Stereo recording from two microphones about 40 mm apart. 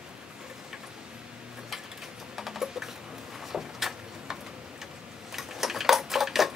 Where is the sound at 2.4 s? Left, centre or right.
Centre.